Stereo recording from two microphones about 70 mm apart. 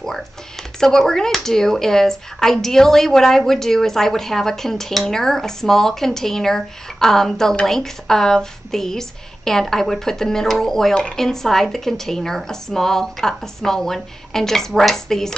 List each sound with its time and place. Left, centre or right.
0.7 s a woman's voice: centre